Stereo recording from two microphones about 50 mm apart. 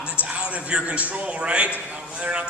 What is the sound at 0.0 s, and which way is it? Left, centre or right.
A man's voice, right.